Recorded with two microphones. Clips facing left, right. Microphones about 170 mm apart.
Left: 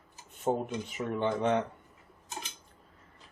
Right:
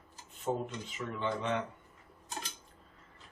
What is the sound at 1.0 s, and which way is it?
Speech, 50° left (ahead or behind).